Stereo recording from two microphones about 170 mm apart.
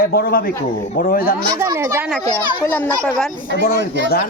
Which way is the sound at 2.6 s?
10° left (ahead or behind).